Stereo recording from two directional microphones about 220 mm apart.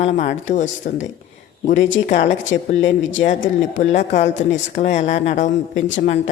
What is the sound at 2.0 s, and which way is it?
Speech, 35° left (ahead or behind).